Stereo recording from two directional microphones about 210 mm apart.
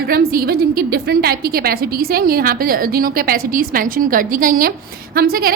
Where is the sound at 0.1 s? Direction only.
45° right (ahead or behind).